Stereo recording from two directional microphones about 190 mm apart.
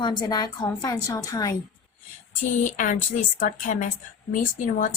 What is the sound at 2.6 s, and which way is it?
A woman's voice, 45° left (ahead or behind).